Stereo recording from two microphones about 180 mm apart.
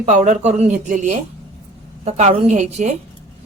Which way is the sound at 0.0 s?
40° right (ahead or behind).